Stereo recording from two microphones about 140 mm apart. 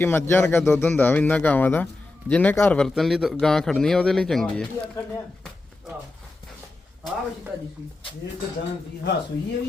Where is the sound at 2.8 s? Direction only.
Centre (ahead or behind).